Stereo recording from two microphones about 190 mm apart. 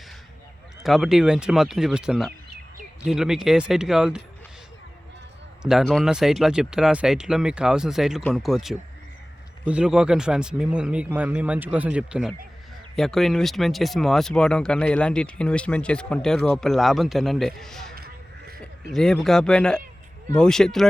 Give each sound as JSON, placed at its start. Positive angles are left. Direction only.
{"t": 0.8, "sound": "speech", "side_deg": 0}
{"t": 5.6, "sound": "speech", "side_deg": 0}
{"t": 17.9, "sound": "music", "side_deg": -50}
{"t": 18.9, "sound": "speech", "side_deg": 0}